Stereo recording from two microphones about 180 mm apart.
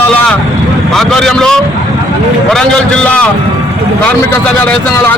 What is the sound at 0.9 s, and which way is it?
A man's voice, centre (ahead or behind).